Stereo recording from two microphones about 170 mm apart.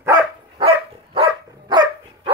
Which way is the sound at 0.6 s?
35° right (ahead or behind).